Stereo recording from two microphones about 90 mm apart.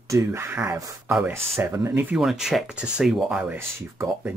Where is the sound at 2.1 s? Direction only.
5° right (ahead or behind).